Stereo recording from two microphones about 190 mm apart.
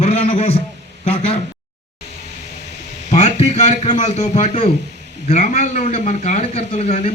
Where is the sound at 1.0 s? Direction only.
35° left (ahead or behind).